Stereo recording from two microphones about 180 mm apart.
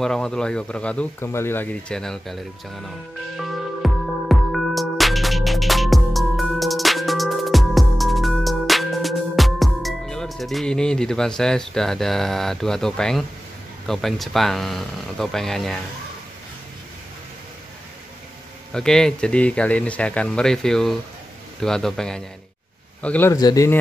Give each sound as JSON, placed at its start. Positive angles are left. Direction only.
{"t": 0.0, "sound": "speech", "side_deg": 5}
{"t": 3.3, "sound": "music", "side_deg": 0}
{"t": 13.8, "sound": "speech", "side_deg": 0}
{"t": 18.7, "sound": "speech", "side_deg": 5}
{"t": 23.3, "sound": "speech", "side_deg": 20}